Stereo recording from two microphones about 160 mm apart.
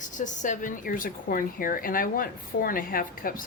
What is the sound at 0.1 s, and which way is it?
A woman's voice, 50° left (ahead or behind).